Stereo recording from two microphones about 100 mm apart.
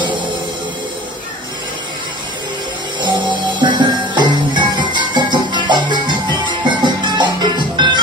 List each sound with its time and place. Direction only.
3.0 s music: 50° right (ahead or behind)